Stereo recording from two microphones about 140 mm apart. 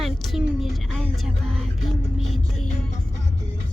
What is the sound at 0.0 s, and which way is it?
Music, centre (ahead or behind).